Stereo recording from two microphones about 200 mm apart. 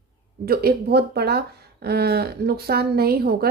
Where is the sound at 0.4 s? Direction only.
50° right (ahead or behind).